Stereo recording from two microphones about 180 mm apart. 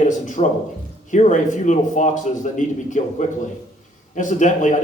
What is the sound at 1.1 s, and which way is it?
A man's voice, 40° left (ahead or behind).